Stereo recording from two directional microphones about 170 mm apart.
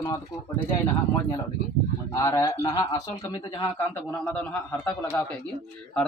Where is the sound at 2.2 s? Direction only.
20° left (ahead or behind).